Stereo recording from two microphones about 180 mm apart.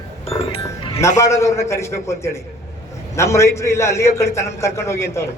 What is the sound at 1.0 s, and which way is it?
A man's voice, 15° left (ahead or behind).